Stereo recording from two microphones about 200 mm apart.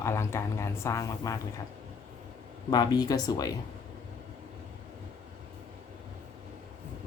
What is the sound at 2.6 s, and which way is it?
Speech, 20° left (ahead or behind).